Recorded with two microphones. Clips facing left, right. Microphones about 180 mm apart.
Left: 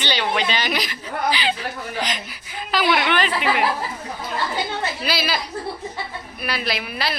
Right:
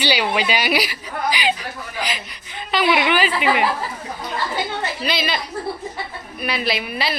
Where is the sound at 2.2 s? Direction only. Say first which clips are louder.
Left 1 dB; 5° left (ahead or behind).